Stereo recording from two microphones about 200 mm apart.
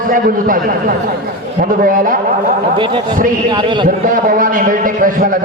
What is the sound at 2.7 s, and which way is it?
Speech, 25° right (ahead or behind).